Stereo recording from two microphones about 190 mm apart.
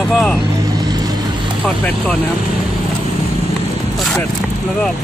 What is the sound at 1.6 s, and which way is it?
Speech, 5° left (ahead or behind).